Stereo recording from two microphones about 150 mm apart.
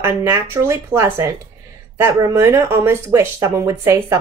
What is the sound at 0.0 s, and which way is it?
Speech, 15° right (ahead or behind).